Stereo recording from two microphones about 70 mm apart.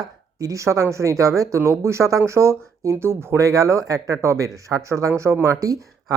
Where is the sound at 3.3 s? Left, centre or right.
Right.